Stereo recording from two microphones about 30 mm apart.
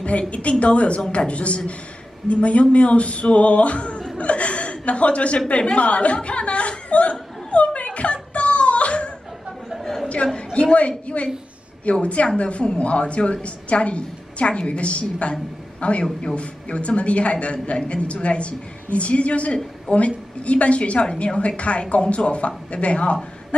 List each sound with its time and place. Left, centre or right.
0.3 s a woman's voice: left
4.2 s chuckle: left
5.6 s speech: left
6.7 s chuckle: left
10.5 s a man's voice: left
16.0 s a woman's voice: left